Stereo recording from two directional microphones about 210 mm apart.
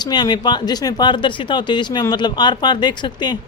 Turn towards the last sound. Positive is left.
turn(degrees=20)  # may be behind; listen again after turning